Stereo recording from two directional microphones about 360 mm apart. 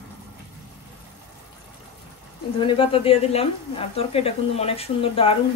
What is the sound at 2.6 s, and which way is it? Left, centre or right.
Speech, centre.